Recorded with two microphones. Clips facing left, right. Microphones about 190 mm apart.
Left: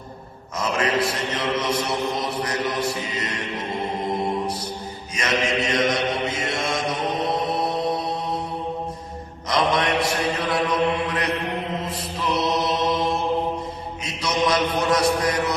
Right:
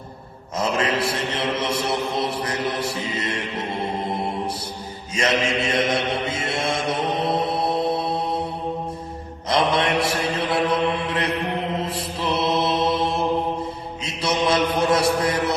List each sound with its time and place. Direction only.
0.6 s mantra: 30° right (ahead or behind)
5.1 s mantra: 30° right (ahead or behind)
9.5 s mantra: 30° right (ahead or behind)